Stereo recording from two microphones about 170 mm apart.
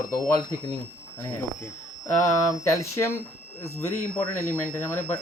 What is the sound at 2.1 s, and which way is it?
Speech, 15° left (ahead or behind).